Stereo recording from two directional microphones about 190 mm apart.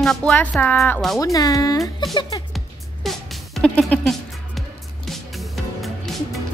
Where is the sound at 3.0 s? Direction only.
Centre (ahead or behind).